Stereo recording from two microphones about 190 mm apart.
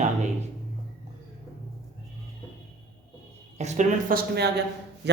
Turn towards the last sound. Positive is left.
turn(degrees=-55)  # may be behind; listen again after turning